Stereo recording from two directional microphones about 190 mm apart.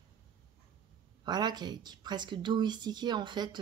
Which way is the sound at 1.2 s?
20° right (ahead or behind).